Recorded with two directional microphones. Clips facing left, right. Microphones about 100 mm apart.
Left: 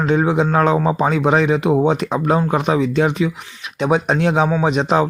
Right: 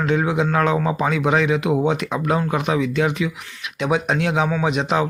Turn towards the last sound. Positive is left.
turn(degrees=35)  # may be behind; listen again after turning